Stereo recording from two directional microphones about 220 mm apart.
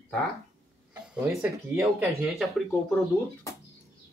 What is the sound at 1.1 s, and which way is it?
Speech, 10° right (ahead or behind).